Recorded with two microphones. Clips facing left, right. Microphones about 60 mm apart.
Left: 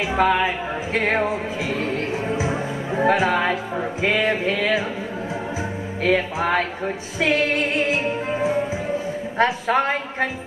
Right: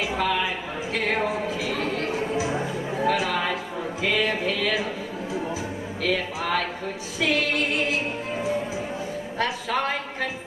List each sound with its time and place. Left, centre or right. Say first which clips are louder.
0.1 s speech: left 6 dB; left
1.7 s a sound: left 2 dB; left
3.0 s speech: left 6 dB; left
6.0 s speech: left 6 dB; left